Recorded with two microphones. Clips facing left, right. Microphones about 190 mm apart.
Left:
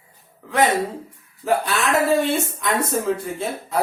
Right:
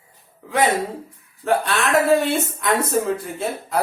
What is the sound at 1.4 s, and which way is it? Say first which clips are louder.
Speech: even; centre (ahead or behind).